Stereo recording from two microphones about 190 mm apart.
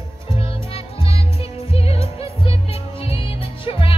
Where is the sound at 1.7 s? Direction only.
30° left (ahead or behind).